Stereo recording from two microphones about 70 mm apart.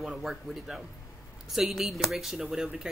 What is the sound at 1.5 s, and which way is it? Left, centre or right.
Speech, centre.